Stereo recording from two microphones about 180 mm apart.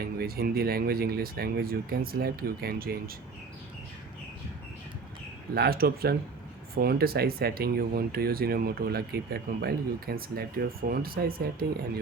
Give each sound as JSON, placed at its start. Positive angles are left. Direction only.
{"t": 0.0, "sound": "speech", "side_deg": -55}
{"t": 5.5, "sound": "speech", "side_deg": -60}